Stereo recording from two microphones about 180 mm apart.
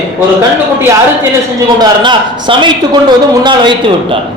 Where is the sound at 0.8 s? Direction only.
15° right (ahead or behind).